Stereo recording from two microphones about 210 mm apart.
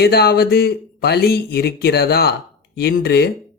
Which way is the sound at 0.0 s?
50° left (ahead or behind).